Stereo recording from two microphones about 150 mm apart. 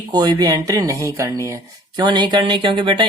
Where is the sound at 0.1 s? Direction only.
25° right (ahead or behind).